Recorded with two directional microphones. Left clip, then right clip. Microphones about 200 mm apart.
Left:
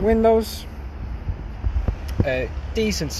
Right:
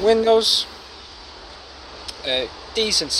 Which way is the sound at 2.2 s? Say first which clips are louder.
Right 2 dB; 5° left (ahead or behind).